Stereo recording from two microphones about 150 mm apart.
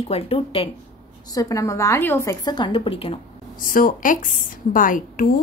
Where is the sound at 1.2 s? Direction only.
25° left (ahead or behind).